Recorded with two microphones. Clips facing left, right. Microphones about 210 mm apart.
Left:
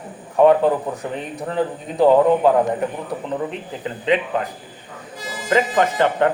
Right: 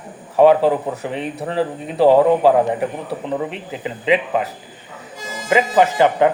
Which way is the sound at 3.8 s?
5° right (ahead or behind).